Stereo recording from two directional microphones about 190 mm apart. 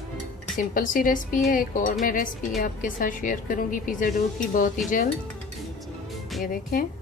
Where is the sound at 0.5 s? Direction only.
45° left (ahead or behind).